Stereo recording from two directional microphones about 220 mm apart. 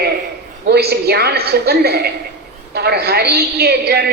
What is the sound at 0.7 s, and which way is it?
A woman's voice, 45° right (ahead or behind).